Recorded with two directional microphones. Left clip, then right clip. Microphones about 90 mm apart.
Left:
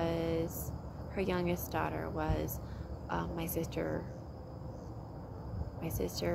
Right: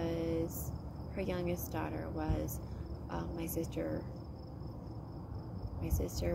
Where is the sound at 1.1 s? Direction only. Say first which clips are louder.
Left 3 dB; 25° left (ahead or behind).